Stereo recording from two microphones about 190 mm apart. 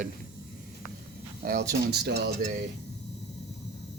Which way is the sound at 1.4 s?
55° right (ahead or behind).